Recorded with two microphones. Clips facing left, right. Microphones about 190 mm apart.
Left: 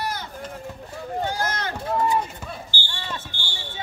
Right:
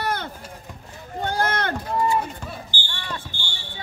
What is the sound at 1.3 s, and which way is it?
Run, 60° right (ahead or behind).